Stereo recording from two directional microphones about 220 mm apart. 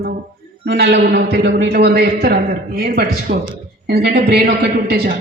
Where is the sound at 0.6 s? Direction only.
50° right (ahead or behind).